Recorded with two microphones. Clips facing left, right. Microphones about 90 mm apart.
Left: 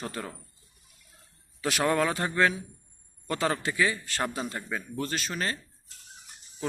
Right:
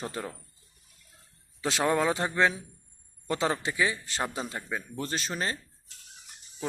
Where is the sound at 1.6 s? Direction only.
25° right (ahead or behind).